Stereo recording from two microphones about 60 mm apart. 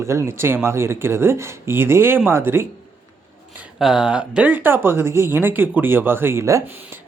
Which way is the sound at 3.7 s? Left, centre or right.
Centre.